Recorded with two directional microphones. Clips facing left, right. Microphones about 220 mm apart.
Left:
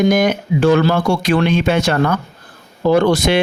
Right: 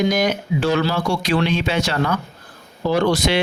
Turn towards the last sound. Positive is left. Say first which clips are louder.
# left 5 dB
turn(degrees=50)  # may be behind; listen again after turning